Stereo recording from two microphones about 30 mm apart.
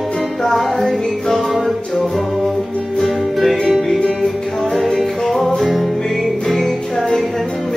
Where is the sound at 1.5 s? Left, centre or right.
Centre.